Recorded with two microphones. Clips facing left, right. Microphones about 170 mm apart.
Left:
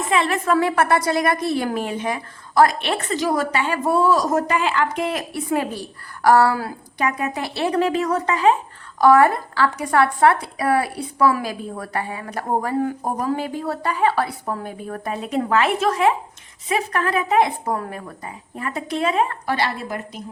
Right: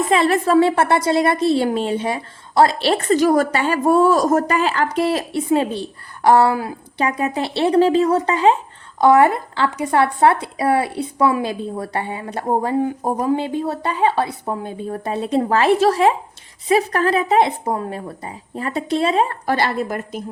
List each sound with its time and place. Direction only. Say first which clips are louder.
0.1 s speech: right 3 dB; 35° right (ahead or behind)
3.2 s a woman's voice: right 5 dB; 45° right (ahead or behind); by 19.4 s 30° right (ahead or behind)
19.5 s a woman's voice: right 4 dB; 50° right (ahead or behind)